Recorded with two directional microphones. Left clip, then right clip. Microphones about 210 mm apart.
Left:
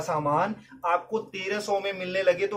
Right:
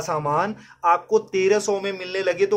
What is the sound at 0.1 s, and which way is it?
Speech, 50° right (ahead or behind).